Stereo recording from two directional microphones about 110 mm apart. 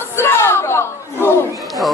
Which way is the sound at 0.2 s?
20° left (ahead or behind).